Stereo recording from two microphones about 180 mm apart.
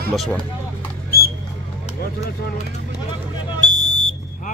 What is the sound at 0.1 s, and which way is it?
Speech, centre (ahead or behind).